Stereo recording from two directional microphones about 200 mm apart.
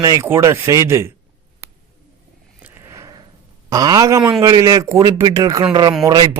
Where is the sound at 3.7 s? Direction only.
20° right (ahead or behind).